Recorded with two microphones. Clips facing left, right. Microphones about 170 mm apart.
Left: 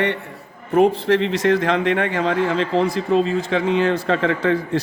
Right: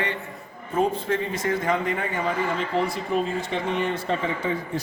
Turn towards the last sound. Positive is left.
turn(degrees=90)